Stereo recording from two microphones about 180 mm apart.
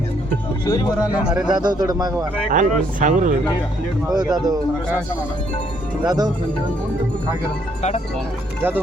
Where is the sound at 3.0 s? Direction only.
45° right (ahead or behind).